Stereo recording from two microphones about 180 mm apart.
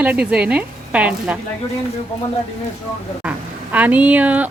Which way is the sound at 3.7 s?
10° right (ahead or behind).